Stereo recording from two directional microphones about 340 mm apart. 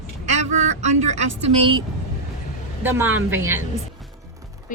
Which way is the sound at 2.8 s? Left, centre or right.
Centre.